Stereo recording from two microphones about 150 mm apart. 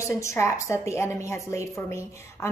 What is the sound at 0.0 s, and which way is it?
A woman's voice, 20° left (ahead or behind).